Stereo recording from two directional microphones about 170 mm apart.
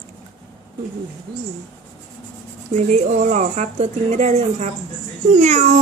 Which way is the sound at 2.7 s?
45° right (ahead or behind).